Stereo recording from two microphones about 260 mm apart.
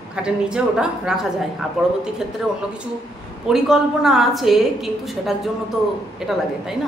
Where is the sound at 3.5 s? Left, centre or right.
Centre.